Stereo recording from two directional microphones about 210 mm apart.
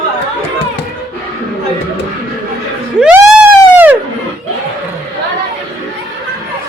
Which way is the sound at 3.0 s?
5° right (ahead or behind).